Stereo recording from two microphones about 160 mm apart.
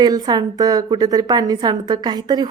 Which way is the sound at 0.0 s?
25° right (ahead or behind).